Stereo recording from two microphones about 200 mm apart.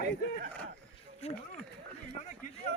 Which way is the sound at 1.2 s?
30° left (ahead or behind).